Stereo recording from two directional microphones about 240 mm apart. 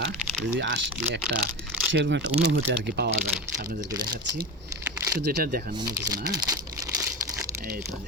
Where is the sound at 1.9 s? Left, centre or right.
Right.